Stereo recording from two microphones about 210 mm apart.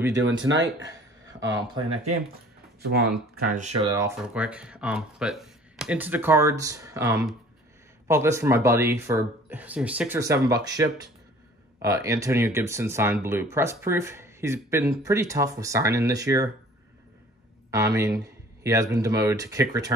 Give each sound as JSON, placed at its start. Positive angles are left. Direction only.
{"t": 0.1, "sound": "speech", "side_deg": -60}
{"t": 2.8, "sound": "speech", "side_deg": -50}
{"t": 3.8, "sound": "speech", "side_deg": -15}
{"t": 4.3, "sound": "speech", "side_deg": -5}
{"t": 17.6, "sound": "speech", "side_deg": -15}
{"t": 18.2, "sound": "a sound", "side_deg": -15}
{"t": 18.9, "sound": "speech", "side_deg": -15}